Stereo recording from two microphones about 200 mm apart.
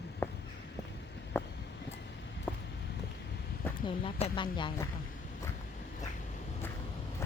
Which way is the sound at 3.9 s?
25° left (ahead or behind).